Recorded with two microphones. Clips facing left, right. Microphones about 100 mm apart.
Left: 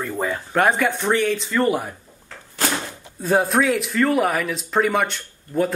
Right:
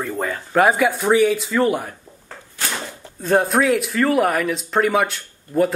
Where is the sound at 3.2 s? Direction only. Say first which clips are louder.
Right 1 dB; centre (ahead or behind).